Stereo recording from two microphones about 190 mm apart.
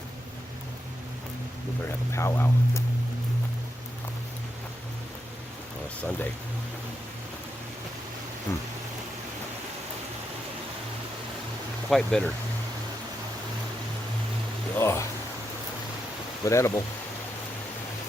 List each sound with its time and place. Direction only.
2.1 s speech: 15° left (ahead or behind)
8.5 s speech: 15° left (ahead or behind)
11.9 s speech: centre (ahead or behind)
14.8 s a sound: 15° left (ahead or behind)
16.5 s speech: 15° left (ahead or behind)